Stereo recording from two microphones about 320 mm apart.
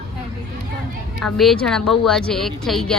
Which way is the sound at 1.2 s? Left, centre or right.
Centre.